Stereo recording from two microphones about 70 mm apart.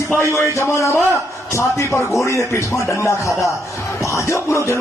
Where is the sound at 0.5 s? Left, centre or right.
Left.